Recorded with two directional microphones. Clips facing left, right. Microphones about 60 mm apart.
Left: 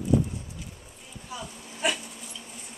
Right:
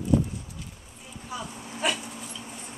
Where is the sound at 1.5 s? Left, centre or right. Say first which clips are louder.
Even; right.